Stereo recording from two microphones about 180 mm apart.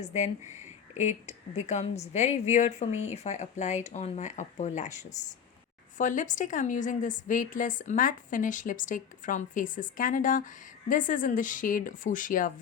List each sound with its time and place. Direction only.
0.0 s a woman's voice: 40° left (ahead or behind)